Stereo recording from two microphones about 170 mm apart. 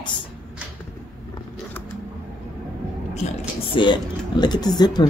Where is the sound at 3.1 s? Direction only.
40° left (ahead or behind).